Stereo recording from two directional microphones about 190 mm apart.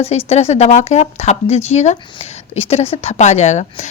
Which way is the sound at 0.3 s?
35° left (ahead or behind).